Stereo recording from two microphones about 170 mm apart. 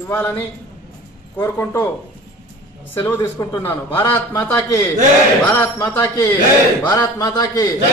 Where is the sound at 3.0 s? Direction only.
15° left (ahead or behind).